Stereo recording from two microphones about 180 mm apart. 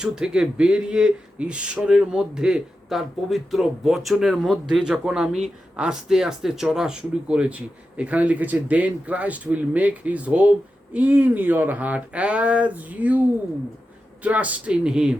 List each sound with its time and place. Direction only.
0.0 s speech: 5° right (ahead or behind)